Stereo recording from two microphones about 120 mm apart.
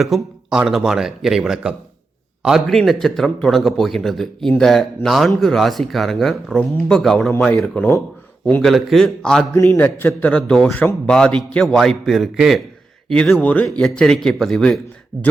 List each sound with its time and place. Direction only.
0.0 s a man's voice: 5° right (ahead or behind)
7.3 s speech: 15° left (ahead or behind)
7.6 s a man's voice: 5° left (ahead or behind)
9.6 s a man's voice: 20° left (ahead or behind); by 14.8 s 5° left (ahead or behind)